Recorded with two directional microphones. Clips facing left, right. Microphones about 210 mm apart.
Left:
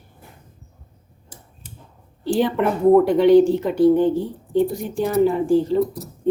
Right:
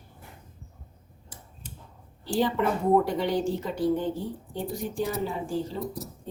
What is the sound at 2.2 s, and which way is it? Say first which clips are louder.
A woman's voice: left 6 dB; 65° left (ahead or behind).